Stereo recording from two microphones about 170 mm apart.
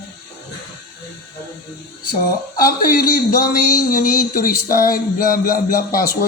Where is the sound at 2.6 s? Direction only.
60° left (ahead or behind).